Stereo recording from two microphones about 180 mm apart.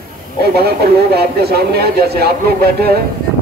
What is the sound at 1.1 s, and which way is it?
Speech, 60° right (ahead or behind).